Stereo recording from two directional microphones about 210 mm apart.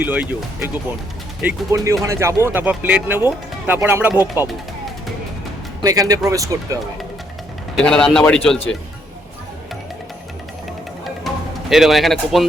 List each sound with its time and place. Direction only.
0.0 s speech: 10° right (ahead or behind)
5.8 s speech: 15° right (ahead or behind)
7.8 s speech: 5° left (ahead or behind)
11.3 s music: centre (ahead or behind)
11.7 s speech: centre (ahead or behind)